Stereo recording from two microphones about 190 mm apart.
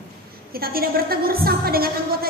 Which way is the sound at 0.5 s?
50° right (ahead or behind).